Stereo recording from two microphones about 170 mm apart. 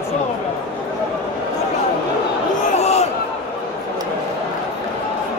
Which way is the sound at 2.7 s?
40° left (ahead or behind).